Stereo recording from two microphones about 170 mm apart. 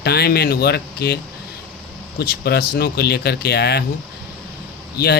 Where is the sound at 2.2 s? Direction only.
65° left (ahead or behind).